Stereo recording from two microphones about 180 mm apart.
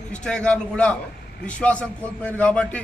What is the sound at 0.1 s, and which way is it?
A man's voice, 5° left (ahead or behind).